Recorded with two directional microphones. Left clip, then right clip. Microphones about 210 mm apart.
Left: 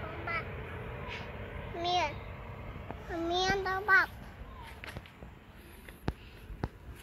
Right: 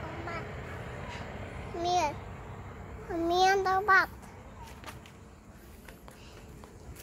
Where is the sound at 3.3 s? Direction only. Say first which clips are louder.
Right 6 dB; 45° right (ahead or behind).